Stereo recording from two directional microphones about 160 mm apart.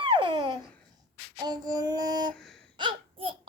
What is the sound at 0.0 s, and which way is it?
Babbling, 30° right (ahead or behind).